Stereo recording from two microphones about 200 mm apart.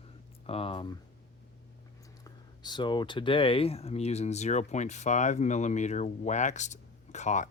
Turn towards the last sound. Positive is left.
turn(degrees=35)  # may be behind; listen again after turning